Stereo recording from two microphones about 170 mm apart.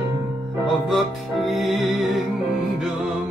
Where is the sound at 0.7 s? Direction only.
Centre (ahead or behind).